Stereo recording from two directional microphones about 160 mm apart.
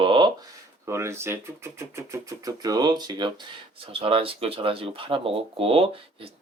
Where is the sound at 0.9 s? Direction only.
15° right (ahead or behind); by 6.3 s 35° right (ahead or behind).